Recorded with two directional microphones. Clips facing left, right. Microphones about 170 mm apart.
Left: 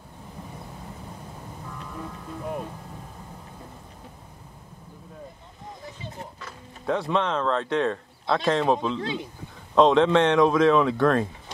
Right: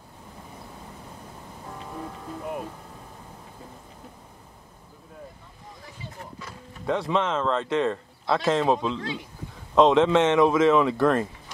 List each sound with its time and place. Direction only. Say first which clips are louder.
6.9 s speech: even; centre (ahead or behind)
9.0 s speech: left 3 dB; 25° left (ahead or behind)
9.8 s speech: even; centre (ahead or behind)